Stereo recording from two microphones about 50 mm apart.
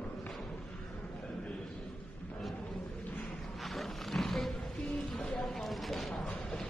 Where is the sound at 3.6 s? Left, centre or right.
Centre.